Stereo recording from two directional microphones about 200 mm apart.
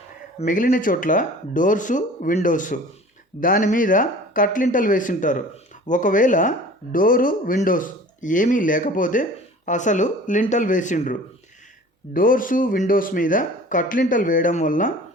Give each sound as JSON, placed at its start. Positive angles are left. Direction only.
{"t": 0.3, "sound": "speech", "side_deg": 40}